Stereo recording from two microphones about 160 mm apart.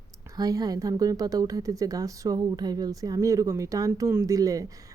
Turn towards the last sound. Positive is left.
turn(degrees=-20)  # may be behind; listen again after turning